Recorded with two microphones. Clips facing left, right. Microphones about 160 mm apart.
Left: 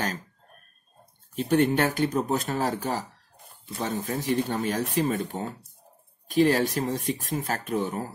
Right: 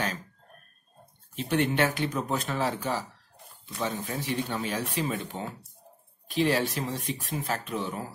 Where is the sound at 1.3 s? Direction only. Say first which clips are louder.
Left 5 dB; 45° left (ahead or behind).